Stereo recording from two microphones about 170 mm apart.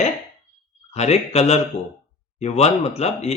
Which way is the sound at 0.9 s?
40° left (ahead or behind).